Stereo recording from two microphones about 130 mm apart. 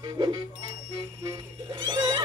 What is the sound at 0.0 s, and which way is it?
Speech, 35° right (ahead or behind).